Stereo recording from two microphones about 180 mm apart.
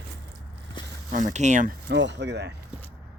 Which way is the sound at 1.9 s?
80° right.